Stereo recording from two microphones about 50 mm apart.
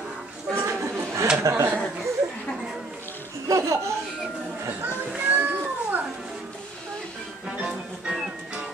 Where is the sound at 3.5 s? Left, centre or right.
Right.